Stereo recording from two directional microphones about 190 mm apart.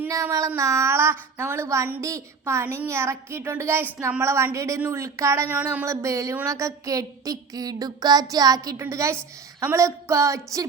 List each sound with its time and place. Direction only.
0.0 s a woman's voice: 15° right (ahead or behind)